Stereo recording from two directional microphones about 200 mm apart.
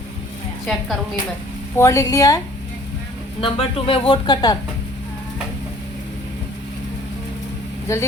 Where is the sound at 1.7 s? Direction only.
15° left (ahead or behind).